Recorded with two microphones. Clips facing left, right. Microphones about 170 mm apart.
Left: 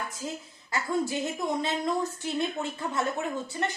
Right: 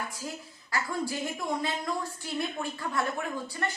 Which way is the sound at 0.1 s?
20° left (ahead or behind).